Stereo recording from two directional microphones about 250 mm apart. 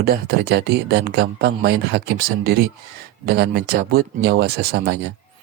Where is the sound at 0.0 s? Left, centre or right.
Right.